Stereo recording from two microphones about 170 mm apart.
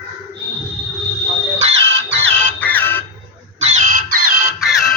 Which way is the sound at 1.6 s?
35° right (ahead or behind).